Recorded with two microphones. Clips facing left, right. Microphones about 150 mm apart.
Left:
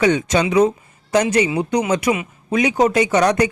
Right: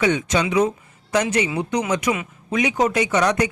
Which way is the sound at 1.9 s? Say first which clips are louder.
Left 3 dB; 35° left (ahead or behind).